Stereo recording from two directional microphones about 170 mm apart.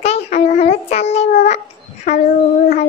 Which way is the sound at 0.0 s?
40° left (ahead or behind).